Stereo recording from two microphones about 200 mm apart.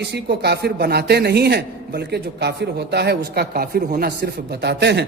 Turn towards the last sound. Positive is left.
turn(degrees=-55)  # may be behind; listen again after turning